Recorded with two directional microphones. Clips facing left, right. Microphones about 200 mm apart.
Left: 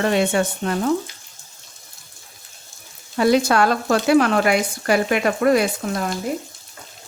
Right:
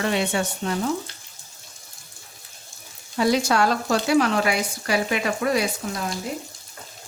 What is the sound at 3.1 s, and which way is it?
Speech, 60° left (ahead or behind).